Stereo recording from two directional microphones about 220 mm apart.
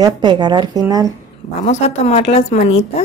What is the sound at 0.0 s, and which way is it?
Speech, 20° right (ahead or behind).